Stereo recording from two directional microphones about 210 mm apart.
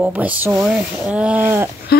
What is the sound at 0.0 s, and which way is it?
Speech, 5° right (ahead or behind).